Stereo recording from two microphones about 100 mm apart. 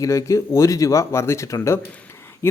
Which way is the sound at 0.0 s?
35° left (ahead or behind).